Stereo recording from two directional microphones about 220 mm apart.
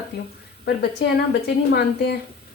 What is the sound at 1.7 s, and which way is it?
Speech, 50° left (ahead or behind).